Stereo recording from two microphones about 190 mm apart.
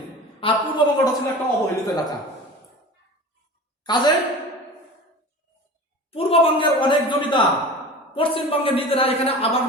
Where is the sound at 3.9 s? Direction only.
20° left (ahead or behind).